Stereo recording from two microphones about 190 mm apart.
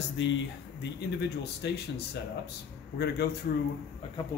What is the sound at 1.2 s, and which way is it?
Speech, 65° left (ahead or behind).